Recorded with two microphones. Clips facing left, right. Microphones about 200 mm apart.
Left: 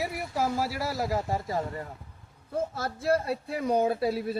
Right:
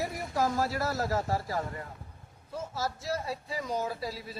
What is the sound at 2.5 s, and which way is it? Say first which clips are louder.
Speech: left 4 dB; 55° left (ahead or behind).